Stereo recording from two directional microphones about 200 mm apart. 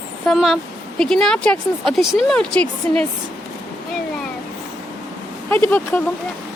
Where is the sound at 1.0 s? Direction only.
5° left (ahead or behind).